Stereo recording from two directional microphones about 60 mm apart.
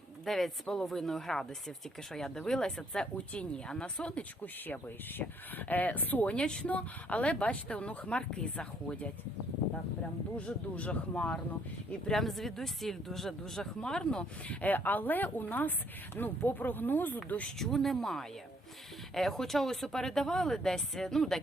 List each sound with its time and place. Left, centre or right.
0.3 s speech: centre
4.6 s speech: left
6.3 s speech: centre
10.3 s speech: left
12.1 s speech: centre; by 17.5 s left
17.6 s speech: centre